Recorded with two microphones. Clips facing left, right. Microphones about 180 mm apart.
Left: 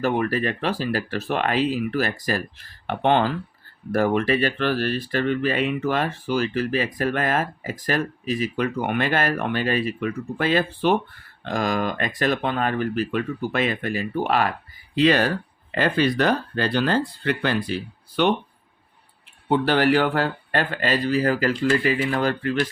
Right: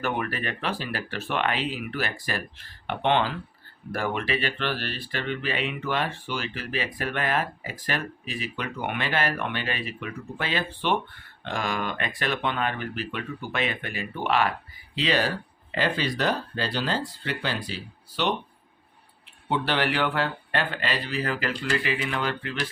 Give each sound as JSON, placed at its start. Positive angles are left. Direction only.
{"t": 0.0, "sound": "speech", "side_deg": 35}
{"t": 14.9, "sound": "speech", "side_deg": 50}
{"t": 19.5, "sound": "speech", "side_deg": 45}